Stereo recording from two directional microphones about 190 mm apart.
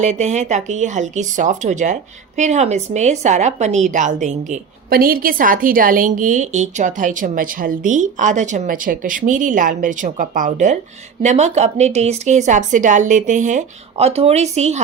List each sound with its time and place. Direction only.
0.0 s speech: 40° right (ahead or behind)
4.9 s a woman's voice: 50° right (ahead or behind); by 14.8 s 35° right (ahead or behind)